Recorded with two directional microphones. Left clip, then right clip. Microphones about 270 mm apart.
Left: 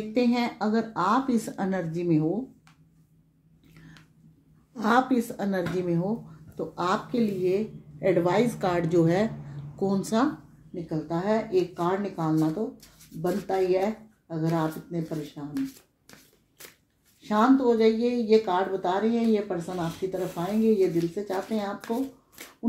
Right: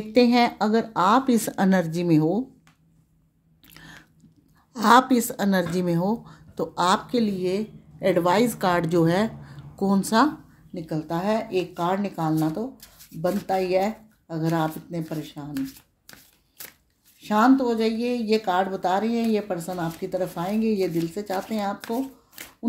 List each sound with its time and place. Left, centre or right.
0.1 s speech: right
4.7 s speech: right
10.7 s speech: right
15.5 s shuffling cards: right
17.2 s speech: right
22.4 s hands: right